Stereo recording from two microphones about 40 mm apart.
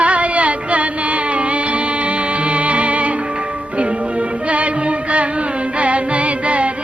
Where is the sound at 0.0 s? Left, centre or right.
Right.